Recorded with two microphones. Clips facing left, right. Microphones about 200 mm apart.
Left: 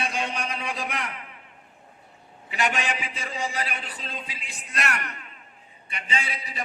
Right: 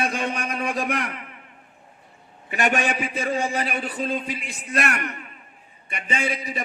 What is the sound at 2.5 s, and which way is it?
A man's voice, 55° right (ahead or behind).